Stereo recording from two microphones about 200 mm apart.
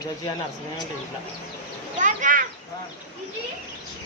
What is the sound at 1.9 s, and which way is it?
Speech, 40° right (ahead or behind).